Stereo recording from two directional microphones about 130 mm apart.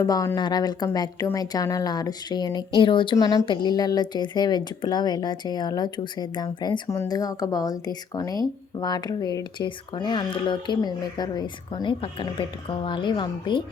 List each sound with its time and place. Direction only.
0.0 s speech: 30° left (ahead or behind)